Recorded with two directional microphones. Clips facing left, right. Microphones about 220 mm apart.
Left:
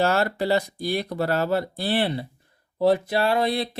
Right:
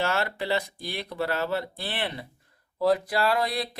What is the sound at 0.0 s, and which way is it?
Speech, 40° left (ahead or behind).